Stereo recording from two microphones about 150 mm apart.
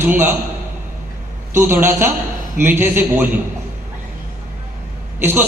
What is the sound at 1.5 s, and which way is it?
A man's voice, 15° right (ahead or behind).